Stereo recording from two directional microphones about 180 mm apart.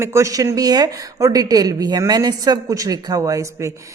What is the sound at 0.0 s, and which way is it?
A woman's voice, 15° right (ahead or behind).